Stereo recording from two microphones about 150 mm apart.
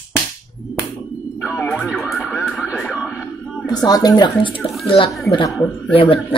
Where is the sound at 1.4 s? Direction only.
20° left (ahead or behind).